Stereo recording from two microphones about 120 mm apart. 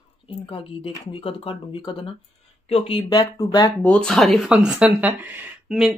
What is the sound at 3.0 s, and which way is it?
Speech, 30° left (ahead or behind).